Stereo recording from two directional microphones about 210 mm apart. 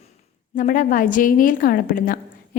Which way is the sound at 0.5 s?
40° left (ahead or behind).